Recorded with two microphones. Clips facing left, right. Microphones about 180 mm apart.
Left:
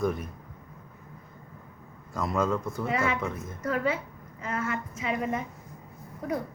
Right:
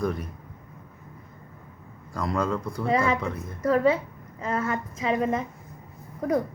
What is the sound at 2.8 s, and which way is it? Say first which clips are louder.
A woman's voice: right 6 dB; 35° right (ahead or behind).